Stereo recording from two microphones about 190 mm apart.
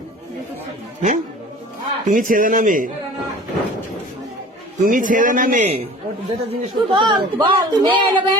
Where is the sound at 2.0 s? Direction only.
45° right (ahead or behind).